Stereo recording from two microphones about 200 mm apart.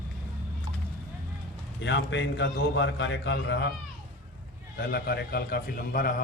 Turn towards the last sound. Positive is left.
turn(degrees=45)  # may be behind; listen again after turning